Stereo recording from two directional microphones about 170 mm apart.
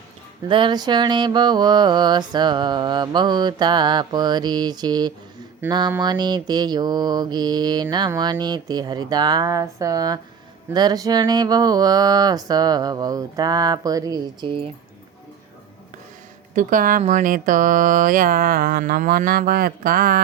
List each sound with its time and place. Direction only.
0.4 s mantra: 30° right (ahead or behind)
16.6 s speech: 50° right (ahead or behind)